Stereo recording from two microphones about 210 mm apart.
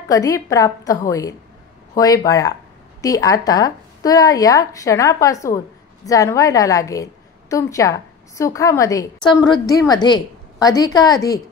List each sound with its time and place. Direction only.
0.1 s a woman's voice: 15° left (ahead or behind)